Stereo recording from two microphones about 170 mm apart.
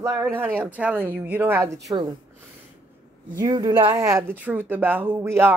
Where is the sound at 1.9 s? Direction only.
25° right (ahead or behind).